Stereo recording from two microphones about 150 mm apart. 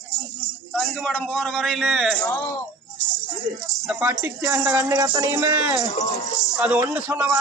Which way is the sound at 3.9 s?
10° right (ahead or behind).